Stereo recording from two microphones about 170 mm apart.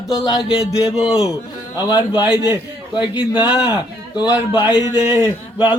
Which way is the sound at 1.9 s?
25° left (ahead or behind).